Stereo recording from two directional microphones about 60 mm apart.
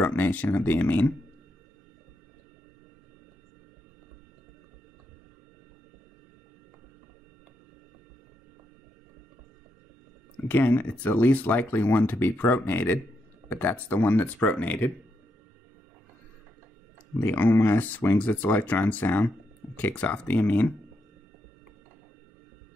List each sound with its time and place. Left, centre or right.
0.0 s speech: left
10.5 s speech: left
17.2 s speech: left